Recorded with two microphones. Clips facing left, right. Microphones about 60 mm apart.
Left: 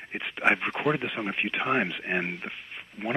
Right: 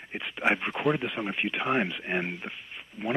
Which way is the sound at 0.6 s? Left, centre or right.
Left.